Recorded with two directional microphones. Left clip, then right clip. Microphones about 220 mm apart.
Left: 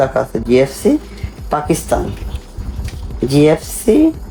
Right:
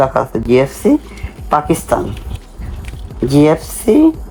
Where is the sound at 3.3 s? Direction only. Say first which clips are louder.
Right 1 dB; 20° right (ahead or behind).